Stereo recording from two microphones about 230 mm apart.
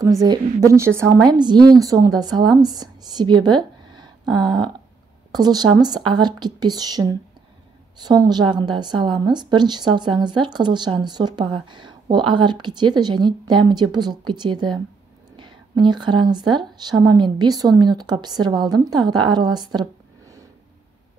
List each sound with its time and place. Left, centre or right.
0.0 s a woman's voice: centre